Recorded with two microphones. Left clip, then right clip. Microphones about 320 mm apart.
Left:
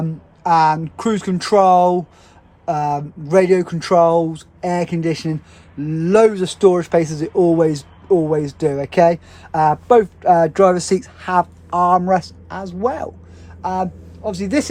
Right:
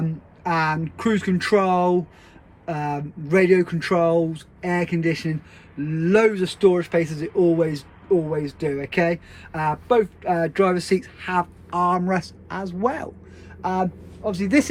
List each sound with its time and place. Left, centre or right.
0.0 s a man's voice: centre